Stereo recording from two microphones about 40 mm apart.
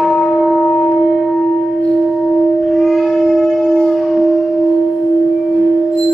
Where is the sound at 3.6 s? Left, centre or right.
Centre.